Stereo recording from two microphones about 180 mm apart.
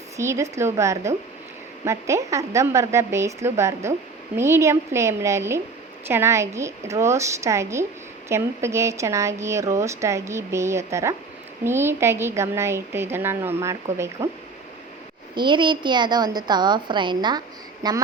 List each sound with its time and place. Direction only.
0.2 s speech: 15° right (ahead or behind)
15.4 s a woman's voice: 25° right (ahead or behind)